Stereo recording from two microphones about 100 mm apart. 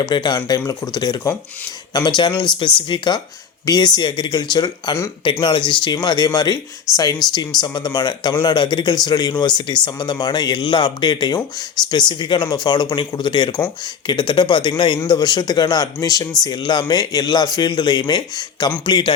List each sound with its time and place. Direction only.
0.0 s speech: 50° left (ahead or behind)
5.2 s speech: 60° left (ahead or behind)